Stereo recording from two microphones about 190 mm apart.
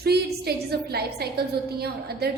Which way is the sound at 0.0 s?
55° right (ahead or behind).